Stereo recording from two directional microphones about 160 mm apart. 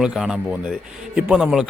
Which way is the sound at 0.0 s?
5° right (ahead or behind).